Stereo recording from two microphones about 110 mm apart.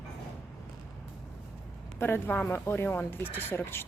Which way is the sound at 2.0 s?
20° left (ahead or behind).